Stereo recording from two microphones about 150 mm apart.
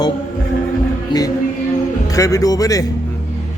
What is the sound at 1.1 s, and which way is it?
Music, 30° left (ahead or behind).